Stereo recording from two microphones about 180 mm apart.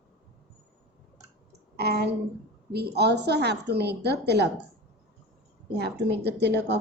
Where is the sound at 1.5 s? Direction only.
65° right (ahead or behind).